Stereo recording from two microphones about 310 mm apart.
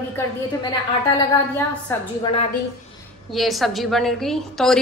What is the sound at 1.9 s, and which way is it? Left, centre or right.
Speech, centre.